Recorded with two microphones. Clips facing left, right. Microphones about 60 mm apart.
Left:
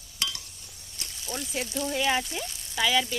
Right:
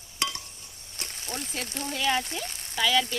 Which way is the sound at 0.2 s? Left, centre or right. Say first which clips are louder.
Right 3 dB; right.